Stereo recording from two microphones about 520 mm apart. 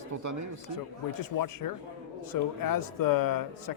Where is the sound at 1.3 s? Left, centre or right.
Left.